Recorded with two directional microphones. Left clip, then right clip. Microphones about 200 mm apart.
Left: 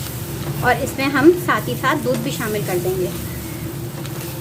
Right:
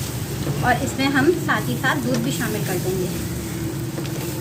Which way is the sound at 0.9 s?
50° left (ahead or behind).